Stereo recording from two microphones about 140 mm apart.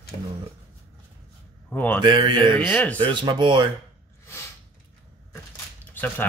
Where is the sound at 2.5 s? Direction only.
10° left (ahead or behind).